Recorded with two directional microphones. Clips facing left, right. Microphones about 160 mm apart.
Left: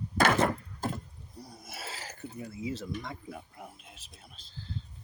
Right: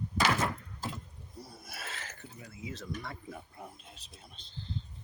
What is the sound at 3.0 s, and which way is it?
Speech, 10° left (ahead or behind).